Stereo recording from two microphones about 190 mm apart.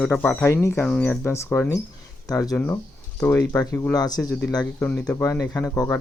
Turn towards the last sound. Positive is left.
turn(degrees=15)  # may be behind; listen again after turning